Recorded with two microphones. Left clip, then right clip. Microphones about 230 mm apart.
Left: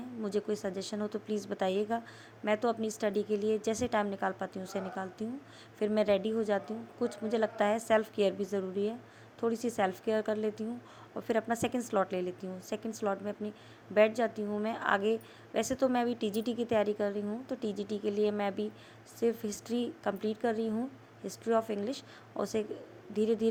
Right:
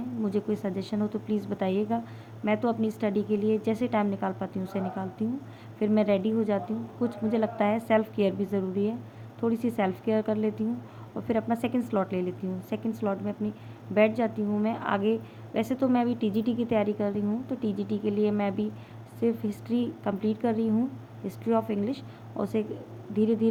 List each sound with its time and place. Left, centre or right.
0.2 s a woman's voice: left